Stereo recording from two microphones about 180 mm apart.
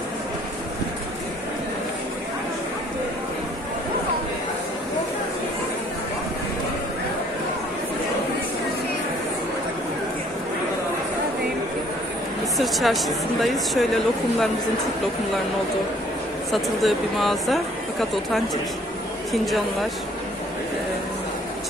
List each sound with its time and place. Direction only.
12.5 s speech: centre (ahead or behind)
16.5 s speech: centre (ahead or behind)